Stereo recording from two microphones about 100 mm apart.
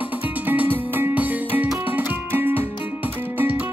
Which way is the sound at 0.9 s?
20° right (ahead or behind).